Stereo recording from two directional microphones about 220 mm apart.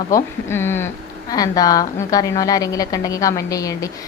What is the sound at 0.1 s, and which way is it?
A woman's voice, 10° left (ahead or behind).